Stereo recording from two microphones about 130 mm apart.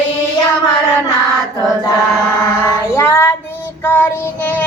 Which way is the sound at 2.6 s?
20° left (ahead or behind).